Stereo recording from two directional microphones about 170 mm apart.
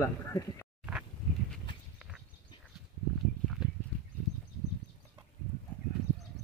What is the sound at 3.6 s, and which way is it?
Horse, 5° right (ahead or behind).